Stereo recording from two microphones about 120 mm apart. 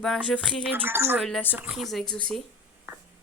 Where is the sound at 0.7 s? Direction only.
15° right (ahead or behind).